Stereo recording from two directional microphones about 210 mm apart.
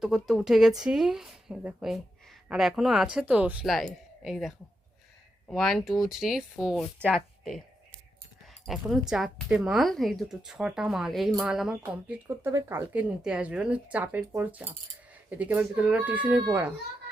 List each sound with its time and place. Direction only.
0.0 s a woman's voice: centre (ahead or behind)
8.6 s a woman's voice: centre (ahead or behind)